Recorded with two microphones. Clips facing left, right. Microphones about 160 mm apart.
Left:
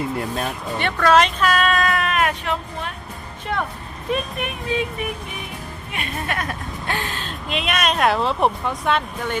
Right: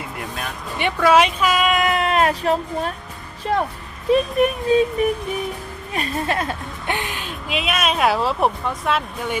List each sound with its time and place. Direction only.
0.8 s speech: 10° right (ahead or behind); by 2.9 s 40° right (ahead or behind)
3.4 s a sound: 35° right (ahead or behind)
5.9 s a woman's voice: 35° right (ahead or behind); by 9.4 s 5° right (ahead or behind)